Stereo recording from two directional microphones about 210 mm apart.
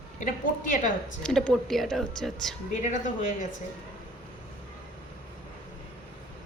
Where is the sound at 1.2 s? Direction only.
5° left (ahead or behind).